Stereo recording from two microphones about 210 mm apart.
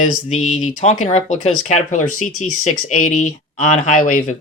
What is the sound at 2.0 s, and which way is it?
Speech, 90° left.